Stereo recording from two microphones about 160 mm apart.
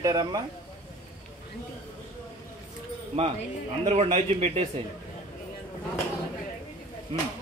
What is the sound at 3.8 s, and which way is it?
Speech, 40° right (ahead or behind).